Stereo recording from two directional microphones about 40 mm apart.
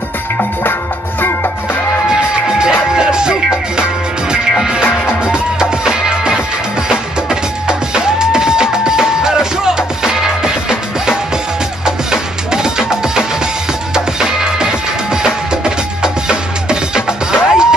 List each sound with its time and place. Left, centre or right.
2.6 s music: centre
5.0 s music: right